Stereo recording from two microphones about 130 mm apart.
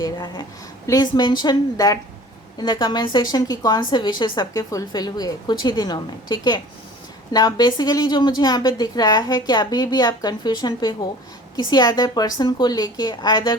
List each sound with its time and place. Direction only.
0.0 s a woman's voice: 35° left (ahead or behind)